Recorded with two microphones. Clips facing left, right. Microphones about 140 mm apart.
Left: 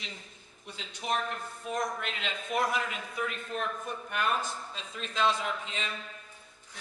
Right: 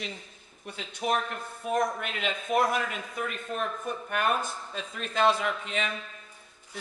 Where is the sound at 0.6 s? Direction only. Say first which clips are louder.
Right 7 dB; 55° right (ahead or behind).